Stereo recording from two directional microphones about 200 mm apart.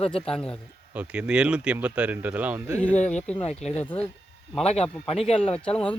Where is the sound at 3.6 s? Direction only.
35° left (ahead or behind).